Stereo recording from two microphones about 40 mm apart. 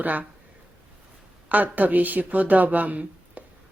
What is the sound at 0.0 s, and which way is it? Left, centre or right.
Speech, right.